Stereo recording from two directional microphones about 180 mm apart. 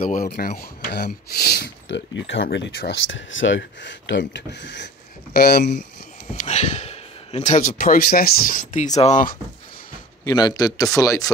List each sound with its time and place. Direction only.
0.0 s speech: 50° left (ahead or behind); by 2.4 s 90° left
2.5 s speech: 75° left (ahead or behind)
5.3 s speech: 55° left (ahead or behind)
6.3 s speech: 40° left (ahead or behind)
10.2 s a man's voice: 20° left (ahead or behind)